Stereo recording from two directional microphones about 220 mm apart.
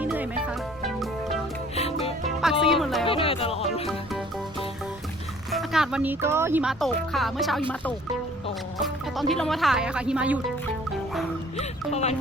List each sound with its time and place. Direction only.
0.0 s music: 5° right (ahead or behind)
1.7 s music: 25° left (ahead or behind)
2.4 s music: centre (ahead or behind)
3.0 s music: 25° left (ahead or behind)
5.5 s speech: centre (ahead or behind)
8.8 s speech: centre (ahead or behind)
10.9 s music: centre (ahead or behind)
11.5 s speech: 30° left (ahead or behind)